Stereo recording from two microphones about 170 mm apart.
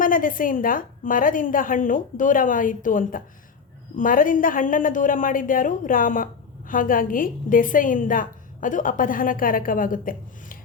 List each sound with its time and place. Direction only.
0.0 s a woman's voice: 55° left (ahead or behind)